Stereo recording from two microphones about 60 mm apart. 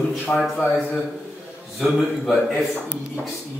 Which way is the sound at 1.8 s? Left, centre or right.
Centre.